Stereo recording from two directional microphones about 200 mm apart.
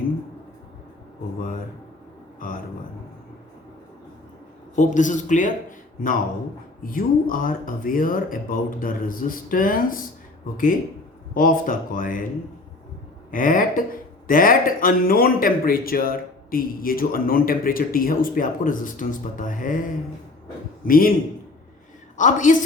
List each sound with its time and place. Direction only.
4.7 s a man's voice: 40° left (ahead or behind)
6.9 s speech: 45° left (ahead or behind)
11.3 s speech: 45° left (ahead or behind)
13.3 s speech: 45° left (ahead or behind)
20.8 s speech: 45° left (ahead or behind)
22.2 s a man's voice: 40° left (ahead or behind)